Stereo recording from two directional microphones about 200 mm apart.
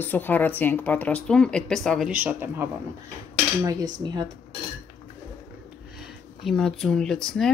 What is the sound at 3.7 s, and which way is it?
Cutlery, 20° right (ahead or behind).